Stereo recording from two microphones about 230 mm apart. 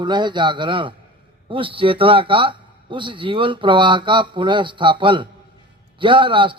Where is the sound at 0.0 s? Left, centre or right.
Centre.